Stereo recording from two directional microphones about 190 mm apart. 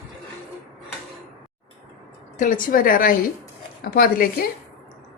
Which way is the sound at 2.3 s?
45° left (ahead or behind).